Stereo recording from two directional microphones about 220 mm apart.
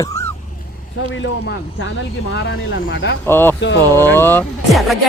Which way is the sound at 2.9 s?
55° left (ahead or behind).